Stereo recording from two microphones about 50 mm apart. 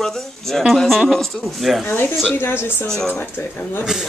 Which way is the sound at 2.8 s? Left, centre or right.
Centre.